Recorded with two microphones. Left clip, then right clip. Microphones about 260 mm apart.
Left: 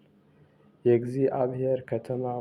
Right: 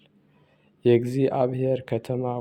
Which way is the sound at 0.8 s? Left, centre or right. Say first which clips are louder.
Right 3 dB; right.